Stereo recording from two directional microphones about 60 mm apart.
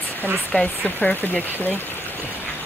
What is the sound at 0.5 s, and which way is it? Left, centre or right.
Speech, left.